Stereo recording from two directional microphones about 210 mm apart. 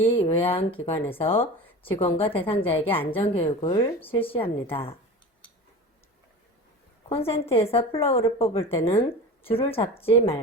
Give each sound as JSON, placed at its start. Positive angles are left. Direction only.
{"t": 0.1, "sound": "a woman's voice", "side_deg": 25}
{"t": 7.1, "sound": "a woman's voice", "side_deg": 30}